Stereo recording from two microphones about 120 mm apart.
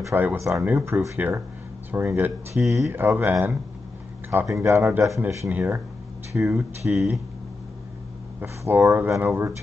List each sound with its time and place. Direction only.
0.1 s speech: 15° right (ahead or behind)
4.6 s speech: 20° right (ahead or behind)
8.4 s speech: 15° right (ahead or behind)